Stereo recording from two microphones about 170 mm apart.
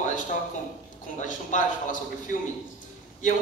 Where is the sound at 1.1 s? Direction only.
50° left (ahead or behind).